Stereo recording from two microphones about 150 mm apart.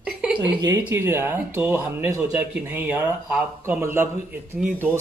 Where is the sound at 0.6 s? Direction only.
20° right (ahead or behind).